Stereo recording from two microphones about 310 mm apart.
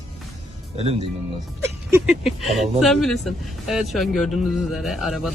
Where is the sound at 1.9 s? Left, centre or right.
Centre.